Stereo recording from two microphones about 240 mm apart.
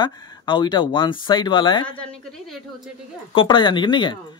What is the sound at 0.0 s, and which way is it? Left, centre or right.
Speech, centre.